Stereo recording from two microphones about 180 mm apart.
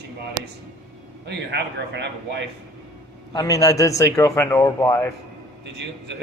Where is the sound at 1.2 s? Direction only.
70° right (ahead or behind).